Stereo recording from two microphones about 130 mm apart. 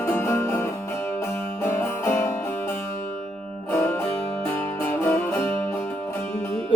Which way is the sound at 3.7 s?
20° left (ahead or behind).